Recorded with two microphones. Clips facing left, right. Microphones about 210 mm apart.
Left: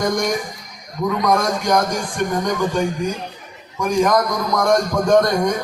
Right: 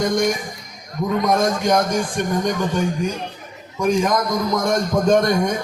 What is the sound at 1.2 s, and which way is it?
A man's voice, 25° right (ahead or behind).